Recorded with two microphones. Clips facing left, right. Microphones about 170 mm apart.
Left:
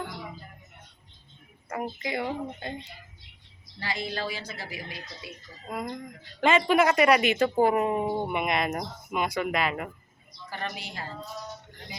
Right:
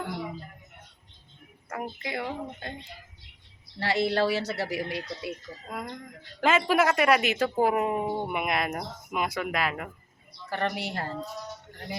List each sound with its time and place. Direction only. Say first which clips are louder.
1.7 s speech: left 2 dB; centre (ahead or behind)
3.8 s a woman's voice: right 8 dB; 75° right (ahead or behind)
5.6 s speech: left 4 dB; 5° left (ahead or behind)
10.5 s a woman's voice: right 6 dB; 65° right (ahead or behind)